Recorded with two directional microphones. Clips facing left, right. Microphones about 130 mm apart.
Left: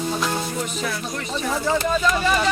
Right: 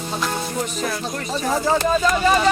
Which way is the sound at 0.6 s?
40° right (ahead or behind).